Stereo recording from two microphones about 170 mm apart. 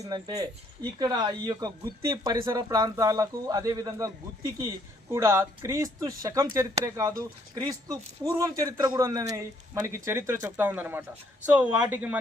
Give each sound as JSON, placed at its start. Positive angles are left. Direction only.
{"t": 0.0, "sound": "speech", "side_deg": -20}